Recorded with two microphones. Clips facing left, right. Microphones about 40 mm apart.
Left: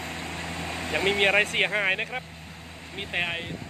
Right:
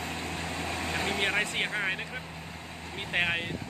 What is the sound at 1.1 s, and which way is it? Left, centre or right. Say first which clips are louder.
Speech: left 8 dB; left.